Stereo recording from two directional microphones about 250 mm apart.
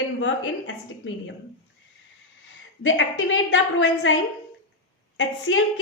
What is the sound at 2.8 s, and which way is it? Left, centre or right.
A woman's voice, left.